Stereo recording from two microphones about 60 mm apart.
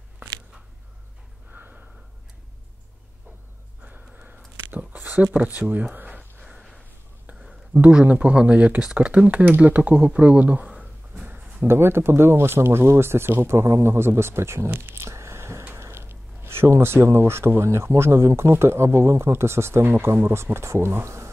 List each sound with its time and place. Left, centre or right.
1.5 s snort: right
3.8 s a sound: right
5.2 s speech: centre
5.5 s speech: right
6.4 s gasp: centre
7.2 s speech: centre
11.2 s a sound: right
11.6 s speech: right
13.7 s speech: right
15.0 s a sound: right
15.6 s speech: right